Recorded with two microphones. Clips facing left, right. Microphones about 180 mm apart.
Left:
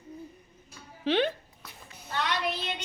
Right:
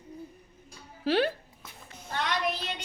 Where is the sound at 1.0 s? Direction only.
5° right (ahead or behind).